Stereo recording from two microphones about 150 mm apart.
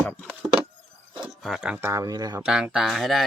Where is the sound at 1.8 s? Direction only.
25° right (ahead or behind).